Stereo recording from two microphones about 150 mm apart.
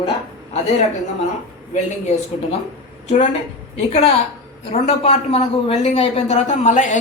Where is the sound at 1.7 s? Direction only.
50° left (ahead or behind).